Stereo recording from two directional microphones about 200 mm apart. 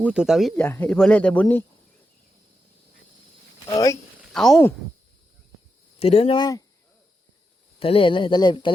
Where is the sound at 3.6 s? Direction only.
15° left (ahead or behind).